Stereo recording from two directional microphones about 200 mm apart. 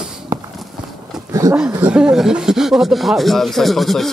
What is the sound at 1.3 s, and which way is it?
Roaring cats, 15° right (ahead or behind).